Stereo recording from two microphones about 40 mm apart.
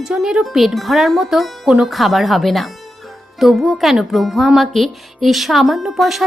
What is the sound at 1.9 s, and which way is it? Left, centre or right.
Speech, centre.